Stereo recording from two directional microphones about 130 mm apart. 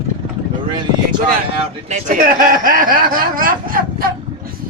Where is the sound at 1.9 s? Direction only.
90° right.